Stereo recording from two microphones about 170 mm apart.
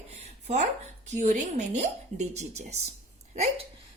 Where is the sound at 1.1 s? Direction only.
45° right (ahead or behind).